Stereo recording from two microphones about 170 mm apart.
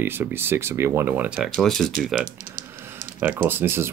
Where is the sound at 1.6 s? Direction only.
Centre (ahead or behind).